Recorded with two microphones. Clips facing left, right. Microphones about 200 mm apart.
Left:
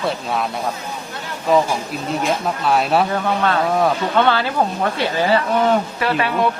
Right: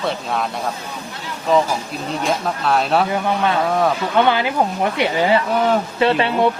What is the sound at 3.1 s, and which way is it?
Speech, 15° right (ahead or behind).